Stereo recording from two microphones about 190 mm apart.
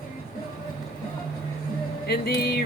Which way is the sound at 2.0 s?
55° left (ahead or behind).